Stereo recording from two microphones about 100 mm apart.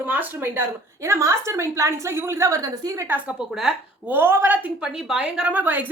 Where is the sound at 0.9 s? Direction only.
30° right (ahead or behind).